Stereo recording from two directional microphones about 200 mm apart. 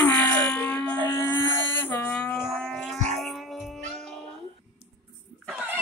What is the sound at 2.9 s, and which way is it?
Insect, 35° right (ahead or behind).